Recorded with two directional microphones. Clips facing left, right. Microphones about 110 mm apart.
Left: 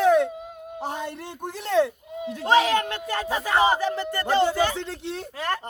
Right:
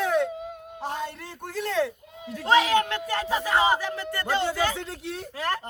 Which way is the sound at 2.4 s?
35° left (ahead or behind).